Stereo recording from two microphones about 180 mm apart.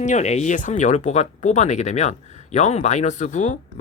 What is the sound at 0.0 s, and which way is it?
Speech, 40° left (ahead or behind).